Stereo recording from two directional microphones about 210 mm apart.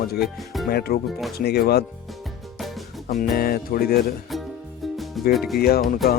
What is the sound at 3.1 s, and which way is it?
Speech, 40° left (ahead or behind).